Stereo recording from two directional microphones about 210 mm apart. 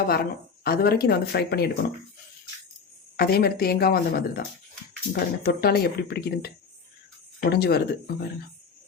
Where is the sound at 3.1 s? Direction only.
45° left (ahead or behind).